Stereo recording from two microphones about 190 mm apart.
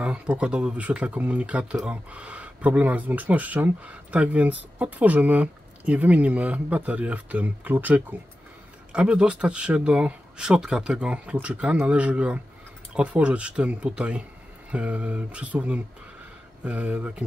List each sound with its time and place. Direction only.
0.0 s speech: 5° right (ahead or behind)